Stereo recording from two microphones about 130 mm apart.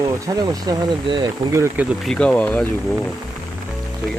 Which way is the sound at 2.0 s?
5° left (ahead or behind).